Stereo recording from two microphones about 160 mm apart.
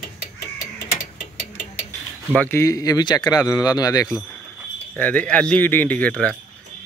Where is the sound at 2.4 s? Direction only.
15° left (ahead or behind).